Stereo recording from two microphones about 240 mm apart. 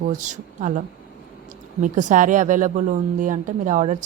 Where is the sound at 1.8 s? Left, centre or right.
Right.